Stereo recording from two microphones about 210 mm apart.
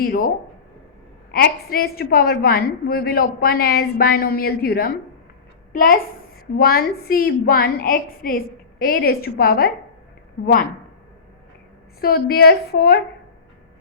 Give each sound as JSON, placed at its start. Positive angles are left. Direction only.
{"t": 0.0, "sound": "a woman's voice", "side_deg": 45}
{"t": 6.6, "sound": "a woman's voice", "side_deg": 45}
{"t": 11.9, "sound": "a woman's voice", "side_deg": 45}